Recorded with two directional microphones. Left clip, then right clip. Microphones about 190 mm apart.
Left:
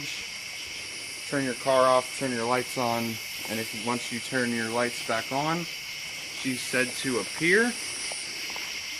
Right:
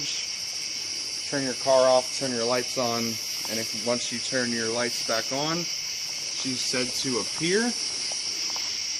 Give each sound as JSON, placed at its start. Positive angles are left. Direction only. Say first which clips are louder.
{"t": 1.3, "sound": "speech", "louder": "right 2 dB", "side_deg": 30}
{"t": 4.4, "sound": "speech", "louder": "even", "side_deg": 40}
{"t": 7.4, "sound": "speech", "louder": "left 4 dB", "side_deg": -45}